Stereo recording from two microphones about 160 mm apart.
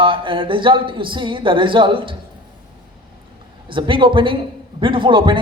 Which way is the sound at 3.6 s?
30° right (ahead or behind).